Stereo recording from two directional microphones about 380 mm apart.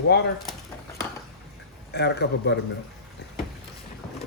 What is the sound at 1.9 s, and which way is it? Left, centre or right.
Speech, left.